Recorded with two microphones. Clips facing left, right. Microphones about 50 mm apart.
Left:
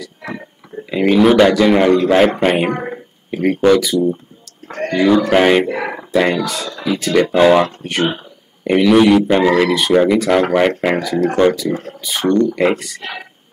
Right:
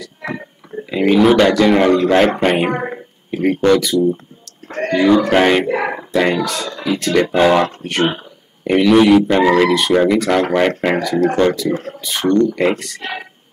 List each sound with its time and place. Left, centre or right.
0.8 s speech: centre
2.7 s speech: centre
3.3 s speech: centre
4.6 s a sound: right
4.9 s speech: centre
5.7 s speech: centre
6.1 s speech: centre